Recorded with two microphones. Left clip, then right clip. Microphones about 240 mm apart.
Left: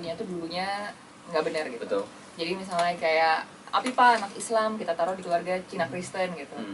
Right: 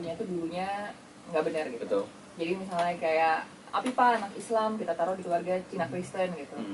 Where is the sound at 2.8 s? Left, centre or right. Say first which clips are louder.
Left 3 dB; centre.